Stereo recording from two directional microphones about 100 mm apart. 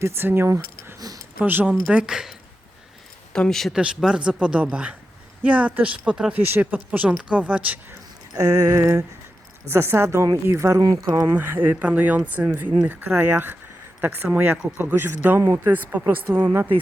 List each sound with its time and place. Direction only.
0.0 s speech: 25° right (ahead or behind)
1.5 s speech: 20° right (ahead or behind)
3.3 s speech: 5° left (ahead or behind)
3.8 s speech: 10° right (ahead or behind)
6.4 s speech: 20° right (ahead or behind)
8.3 s a sound: 35° right (ahead or behind)
9.6 s speech: 25° right (ahead or behind)
10.4 s a sound: 30° right (ahead or behind)
11.3 s speech: 20° right (ahead or behind)